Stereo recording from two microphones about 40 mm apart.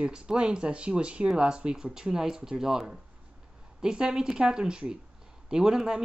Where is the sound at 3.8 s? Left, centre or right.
Centre.